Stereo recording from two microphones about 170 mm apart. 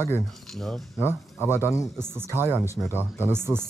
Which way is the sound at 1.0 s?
10° right (ahead or behind).